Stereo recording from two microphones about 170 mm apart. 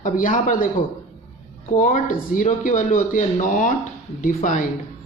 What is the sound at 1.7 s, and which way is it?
A woman's voice, 50° left (ahead or behind).